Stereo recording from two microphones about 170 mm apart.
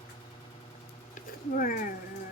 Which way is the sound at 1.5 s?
55° left (ahead or behind).